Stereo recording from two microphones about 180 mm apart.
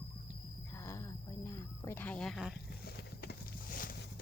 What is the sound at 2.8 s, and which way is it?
Vehicle, 60° left (ahead or behind).